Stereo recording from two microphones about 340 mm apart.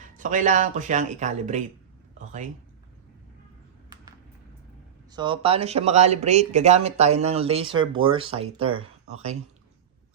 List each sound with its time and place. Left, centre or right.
0.2 s speech: right
5.1 s speech: centre